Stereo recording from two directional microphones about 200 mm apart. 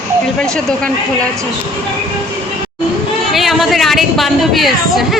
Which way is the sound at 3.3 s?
Centre (ahead or behind).